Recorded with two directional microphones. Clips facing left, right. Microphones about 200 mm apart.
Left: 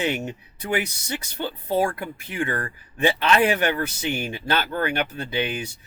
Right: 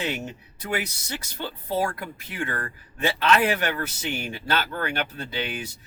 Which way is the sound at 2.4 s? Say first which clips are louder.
Left 4 dB; 15° left (ahead or behind).